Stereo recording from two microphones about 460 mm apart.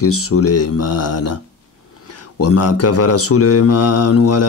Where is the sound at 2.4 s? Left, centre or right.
Left.